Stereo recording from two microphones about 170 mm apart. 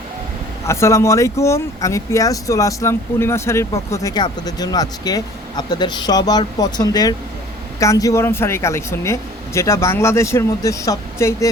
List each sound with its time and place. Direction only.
0.7 s speech: 15° left (ahead or behind)